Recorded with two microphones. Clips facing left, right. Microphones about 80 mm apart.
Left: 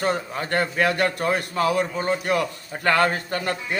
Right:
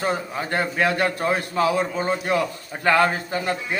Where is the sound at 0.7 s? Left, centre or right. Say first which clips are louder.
Right 2 dB; right.